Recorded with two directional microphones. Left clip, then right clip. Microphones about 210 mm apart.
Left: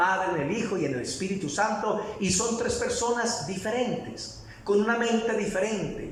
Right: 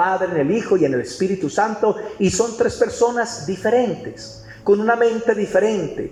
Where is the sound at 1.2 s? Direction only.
40° right (ahead or behind).